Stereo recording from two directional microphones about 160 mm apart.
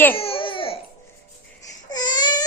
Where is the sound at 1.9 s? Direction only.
25° left (ahead or behind).